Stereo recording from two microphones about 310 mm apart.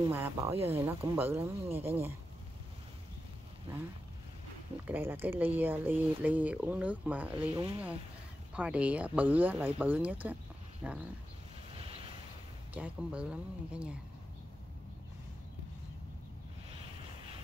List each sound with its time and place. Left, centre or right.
0.1 s speech: centre
4.8 s speech: centre
7.4 s speech: centre
8.5 s speech: centre
12.7 s speech: centre